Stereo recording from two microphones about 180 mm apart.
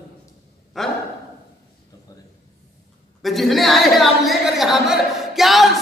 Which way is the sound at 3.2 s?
Centre (ahead or behind).